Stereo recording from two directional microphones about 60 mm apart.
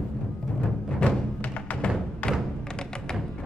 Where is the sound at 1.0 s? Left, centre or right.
Left.